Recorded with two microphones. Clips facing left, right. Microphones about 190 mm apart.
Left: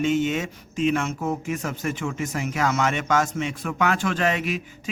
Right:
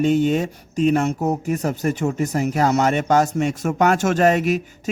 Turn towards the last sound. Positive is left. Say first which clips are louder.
# right 7 dB
turn(degrees=-40)  # may be behind; listen again after turning